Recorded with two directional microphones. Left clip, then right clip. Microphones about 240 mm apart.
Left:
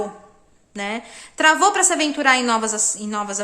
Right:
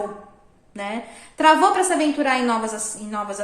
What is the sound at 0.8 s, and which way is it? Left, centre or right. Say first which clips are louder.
A woman's voice: left 2 dB; left.